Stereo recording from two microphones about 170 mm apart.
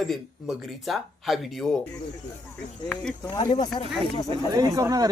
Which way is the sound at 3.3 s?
25° left (ahead or behind).